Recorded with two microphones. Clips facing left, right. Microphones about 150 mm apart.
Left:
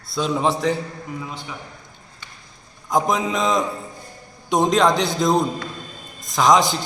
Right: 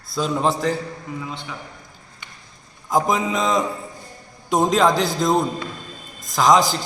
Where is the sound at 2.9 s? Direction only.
Centre (ahead or behind).